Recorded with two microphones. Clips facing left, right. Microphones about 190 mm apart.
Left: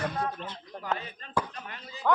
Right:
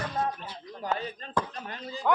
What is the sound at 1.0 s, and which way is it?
Speech, 35° right (ahead or behind).